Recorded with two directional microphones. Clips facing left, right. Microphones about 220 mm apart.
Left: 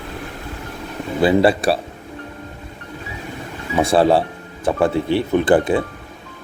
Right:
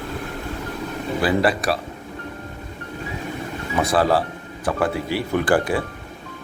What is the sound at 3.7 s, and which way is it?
Speech, 25° left (ahead or behind).